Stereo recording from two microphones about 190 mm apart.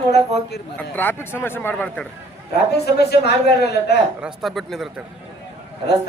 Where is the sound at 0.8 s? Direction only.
10° left (ahead or behind).